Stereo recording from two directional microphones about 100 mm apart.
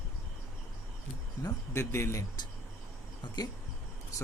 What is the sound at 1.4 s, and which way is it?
Speech, 30° left (ahead or behind).